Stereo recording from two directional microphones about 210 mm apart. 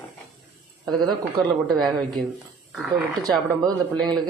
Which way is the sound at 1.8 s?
Centre (ahead or behind).